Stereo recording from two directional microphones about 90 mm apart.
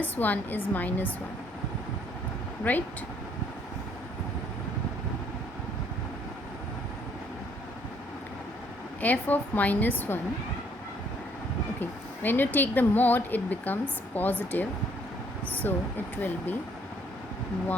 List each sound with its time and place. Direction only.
0.0 s speech: 20° left (ahead or behind)
2.7 s speech: 20° left (ahead or behind)
9.0 s speech: 20° left (ahead or behind)
11.8 s speech: 20° left (ahead or behind)